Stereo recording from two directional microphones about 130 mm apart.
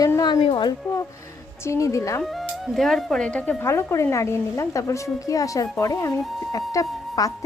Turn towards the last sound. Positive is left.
turn(degrees=25)  # may be behind; listen again after turning